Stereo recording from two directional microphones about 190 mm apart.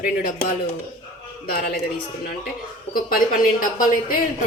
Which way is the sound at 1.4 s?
50° left (ahead or behind).